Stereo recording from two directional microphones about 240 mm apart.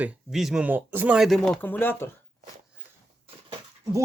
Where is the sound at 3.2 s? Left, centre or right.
Right.